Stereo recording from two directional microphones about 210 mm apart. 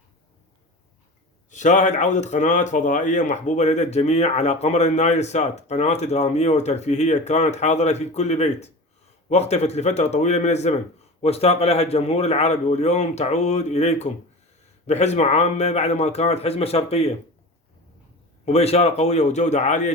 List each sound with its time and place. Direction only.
1.5 s speech: 35° left (ahead or behind)
18.4 s speech: 30° left (ahead or behind)